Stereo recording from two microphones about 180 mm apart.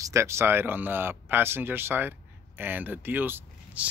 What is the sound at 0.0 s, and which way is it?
Speech, 15° right (ahead or behind).